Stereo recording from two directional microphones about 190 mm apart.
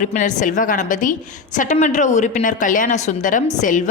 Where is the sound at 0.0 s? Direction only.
40° left (ahead or behind).